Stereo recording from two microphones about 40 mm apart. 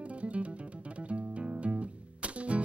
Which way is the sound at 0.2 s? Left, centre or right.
Right.